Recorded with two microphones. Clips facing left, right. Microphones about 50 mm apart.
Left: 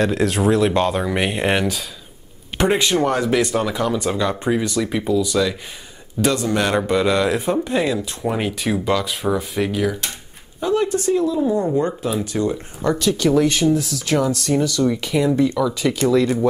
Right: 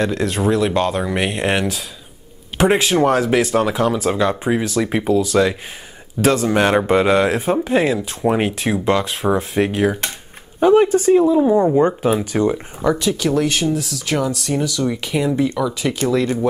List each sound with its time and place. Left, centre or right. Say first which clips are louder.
0.0 s speech: left 1 dB; centre
4.8 s a man's voice: right 2 dB; right
6.5 s speech: right 4 dB; right
7.4 s speech: right 3 dB; centre
8.9 s speech: right 2 dB; right
12.8 s speech: even; centre